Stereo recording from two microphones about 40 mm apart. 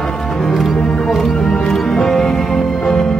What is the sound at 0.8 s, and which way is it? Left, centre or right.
Music, left.